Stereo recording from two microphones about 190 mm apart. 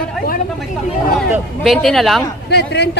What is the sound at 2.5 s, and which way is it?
Speech, 60° left (ahead or behind).